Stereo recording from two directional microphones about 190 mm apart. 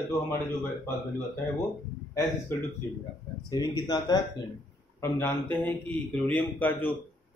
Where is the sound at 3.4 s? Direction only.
20° left (ahead or behind).